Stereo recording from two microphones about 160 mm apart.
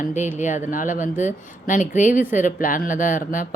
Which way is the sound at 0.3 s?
50° left (ahead or behind).